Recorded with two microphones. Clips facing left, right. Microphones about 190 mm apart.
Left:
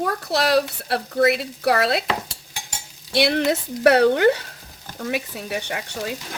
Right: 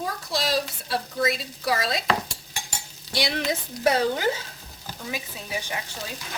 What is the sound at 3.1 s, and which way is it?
A child's voice, 65° left (ahead or behind).